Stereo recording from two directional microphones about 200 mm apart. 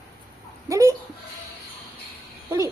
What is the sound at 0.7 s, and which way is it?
Speech, 15° right (ahead or behind).